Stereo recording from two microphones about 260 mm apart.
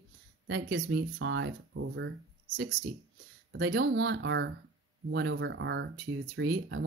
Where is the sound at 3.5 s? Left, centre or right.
Right.